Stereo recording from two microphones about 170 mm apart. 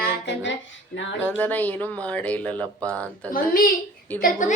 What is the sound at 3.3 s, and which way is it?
A woman's voice, 55° left (ahead or behind).